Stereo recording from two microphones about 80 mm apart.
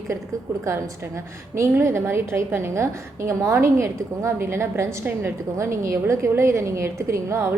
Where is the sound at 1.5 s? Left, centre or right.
Right.